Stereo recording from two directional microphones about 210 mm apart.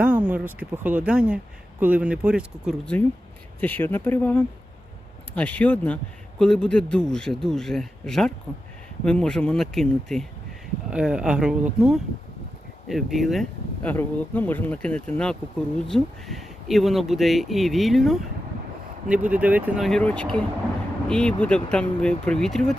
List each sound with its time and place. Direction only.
0.0 s speech: 5° right (ahead or behind)